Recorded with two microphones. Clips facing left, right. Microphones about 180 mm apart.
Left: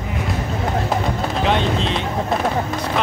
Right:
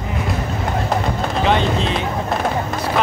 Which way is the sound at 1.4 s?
Centre (ahead or behind).